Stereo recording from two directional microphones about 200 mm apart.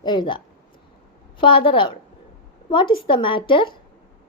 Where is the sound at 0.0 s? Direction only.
20° left (ahead or behind).